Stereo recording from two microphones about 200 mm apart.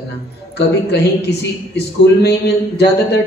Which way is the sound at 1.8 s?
55° left (ahead or behind).